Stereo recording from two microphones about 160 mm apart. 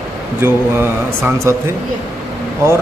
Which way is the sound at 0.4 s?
15° right (ahead or behind).